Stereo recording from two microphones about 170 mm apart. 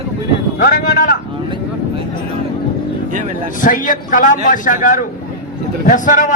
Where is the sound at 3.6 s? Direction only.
50° left (ahead or behind).